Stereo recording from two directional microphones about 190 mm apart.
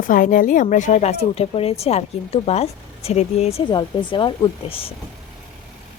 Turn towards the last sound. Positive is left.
turn(degrees=30)  # may be behind; listen again after turning